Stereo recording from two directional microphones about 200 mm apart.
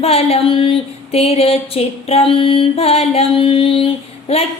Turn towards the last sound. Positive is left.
turn(degrees=30)  # may be behind; listen again after turning